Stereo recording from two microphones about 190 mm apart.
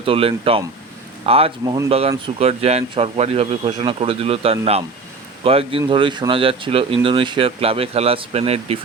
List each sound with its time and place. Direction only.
0.0 s speech: 30° right (ahead or behind)
1.9 s a man's voice: 30° right (ahead or behind)